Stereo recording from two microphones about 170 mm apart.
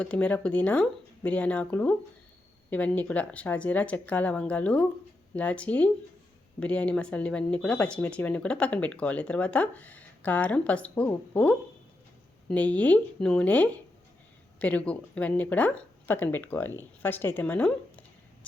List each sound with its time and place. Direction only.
0.0 s speech: 5° left (ahead or behind)